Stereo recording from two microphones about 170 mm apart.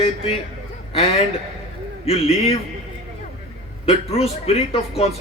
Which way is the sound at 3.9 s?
35° left (ahead or behind).